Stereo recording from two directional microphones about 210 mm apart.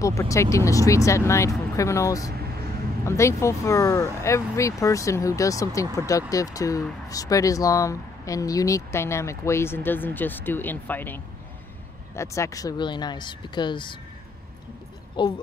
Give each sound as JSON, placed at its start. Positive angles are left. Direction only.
{"t": 0.0, "sound": "speech", "side_deg": 15}
{"t": 15.2, "sound": "speech", "side_deg": 20}